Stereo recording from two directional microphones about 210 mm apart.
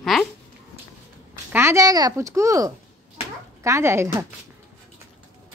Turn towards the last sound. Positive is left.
turn(degrees=-10)  # may be behind; listen again after turning